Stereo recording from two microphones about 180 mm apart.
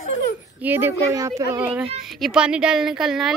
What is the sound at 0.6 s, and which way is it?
Speech, 10° right (ahead or behind).